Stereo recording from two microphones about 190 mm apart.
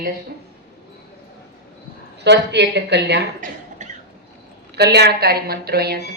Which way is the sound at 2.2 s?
65° right (ahead or behind).